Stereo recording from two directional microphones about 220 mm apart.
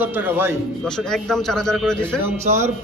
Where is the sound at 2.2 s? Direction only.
30° right (ahead or behind).